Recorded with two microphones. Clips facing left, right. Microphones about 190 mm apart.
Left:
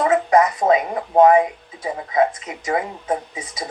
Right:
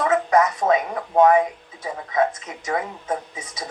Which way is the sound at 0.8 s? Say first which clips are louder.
Left 3 dB; 25° left (ahead or behind).